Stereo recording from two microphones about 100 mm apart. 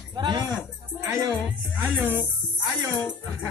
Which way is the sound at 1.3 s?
15° right (ahead or behind).